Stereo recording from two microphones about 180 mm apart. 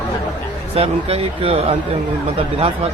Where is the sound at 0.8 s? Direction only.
30° right (ahead or behind).